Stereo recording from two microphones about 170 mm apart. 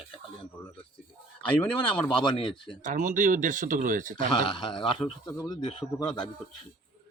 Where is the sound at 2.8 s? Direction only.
50° right (ahead or behind).